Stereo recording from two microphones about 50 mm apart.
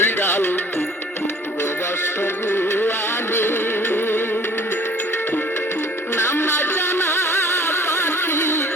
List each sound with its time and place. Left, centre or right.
0.0 s music: left
2.6 s music: left
6.1 s music: left